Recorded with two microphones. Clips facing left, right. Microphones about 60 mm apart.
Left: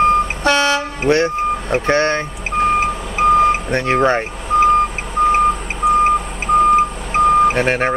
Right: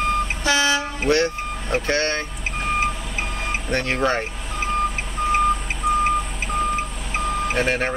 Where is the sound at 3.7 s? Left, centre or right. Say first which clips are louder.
Left 6 dB; left.